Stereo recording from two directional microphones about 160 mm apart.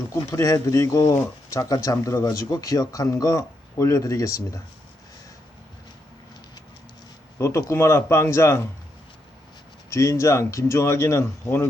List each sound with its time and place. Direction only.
0.3 s speech: 20° left (ahead or behind)
7.3 s speech: 15° left (ahead or behind)
9.9 s speech: 20° left (ahead or behind)